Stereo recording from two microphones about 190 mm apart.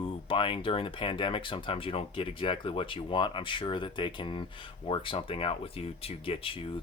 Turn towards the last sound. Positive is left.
turn(degrees=30)  # may be behind; listen again after turning